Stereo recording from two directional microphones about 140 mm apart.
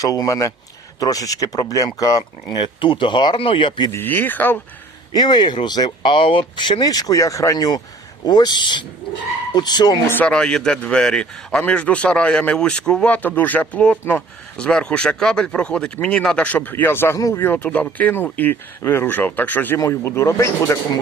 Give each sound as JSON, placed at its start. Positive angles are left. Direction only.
{"t": 0.0, "sound": "a man's voice", "side_deg": 25}
{"t": 3.9, "sound": "a man's voice", "side_deg": 15}
{"t": 5.1, "sound": "a man's voice", "side_deg": 30}
{"t": 10.1, "sound": "a man's voice", "side_deg": 10}